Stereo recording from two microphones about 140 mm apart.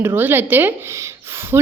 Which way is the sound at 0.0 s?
15° right (ahead or behind).